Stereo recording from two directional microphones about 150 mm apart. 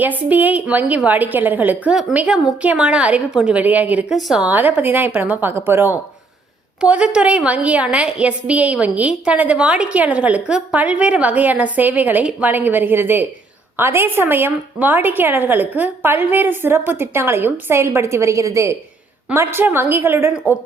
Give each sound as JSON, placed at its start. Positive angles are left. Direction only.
{"t": 0.0, "sound": "a woman's voice", "side_deg": -10}